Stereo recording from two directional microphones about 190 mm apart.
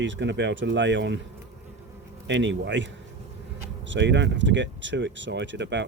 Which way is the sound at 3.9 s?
70° right (ahead or behind).